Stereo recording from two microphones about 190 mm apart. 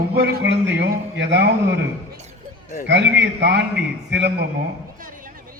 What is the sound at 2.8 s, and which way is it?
Speech, 65° right (ahead or behind).